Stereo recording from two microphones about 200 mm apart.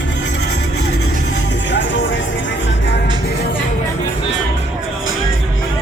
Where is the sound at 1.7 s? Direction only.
65° left (ahead or behind).